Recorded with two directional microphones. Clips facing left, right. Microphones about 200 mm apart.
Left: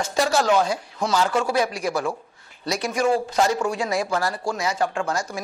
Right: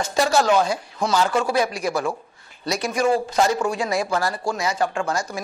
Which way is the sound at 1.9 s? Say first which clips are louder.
Right 1 dB; 30° right (ahead or behind).